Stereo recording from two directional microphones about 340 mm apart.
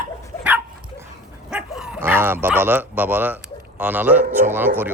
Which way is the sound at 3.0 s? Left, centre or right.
Centre.